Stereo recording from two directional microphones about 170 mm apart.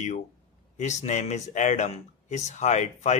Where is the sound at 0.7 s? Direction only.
45° left (ahead or behind).